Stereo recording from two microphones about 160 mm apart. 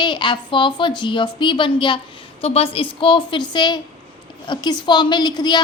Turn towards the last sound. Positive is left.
turn(degrees=25)  # may be behind; listen again after turning